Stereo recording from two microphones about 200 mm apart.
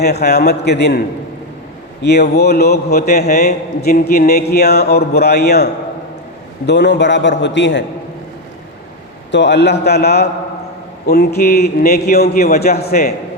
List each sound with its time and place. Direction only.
0.0 s a man's voice: 55° left (ahead or behind)
2.0 s a man's voice: 55° left (ahead or behind)
6.7 s a man's voice: 60° left (ahead or behind)
9.3 s a man's voice: 60° left (ahead or behind)